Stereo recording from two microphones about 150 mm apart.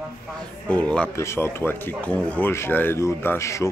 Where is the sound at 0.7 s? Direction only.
10° left (ahead or behind).